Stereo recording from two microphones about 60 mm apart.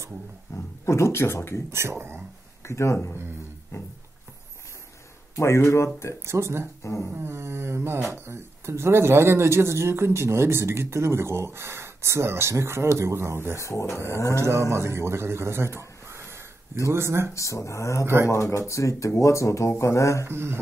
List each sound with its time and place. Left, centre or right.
0.5 s speech: left
1.7 s speech: right
2.6 s speech: left
3.7 s music: left
5.3 s speech: left
6.2 s speech: right
6.8 s speech: left
7.2 s speech: right
13.6 s speech: left
14.3 s speech: right
17.3 s speech: left
18.0 s speech: right
18.3 s speech: left
20.2 s speech: right